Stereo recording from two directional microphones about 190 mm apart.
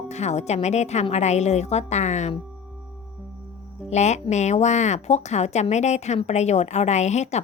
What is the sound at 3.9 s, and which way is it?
Speech, 35° left (ahead or behind).